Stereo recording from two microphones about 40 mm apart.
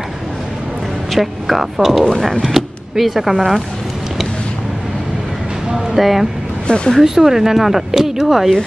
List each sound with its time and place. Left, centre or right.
1.1 s speech: centre
2.0 s speech: centre
2.4 s speech: centre
5.9 s speech: centre